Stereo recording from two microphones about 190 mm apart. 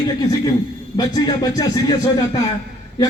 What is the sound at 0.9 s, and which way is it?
A man's voice, 20° left (ahead or behind).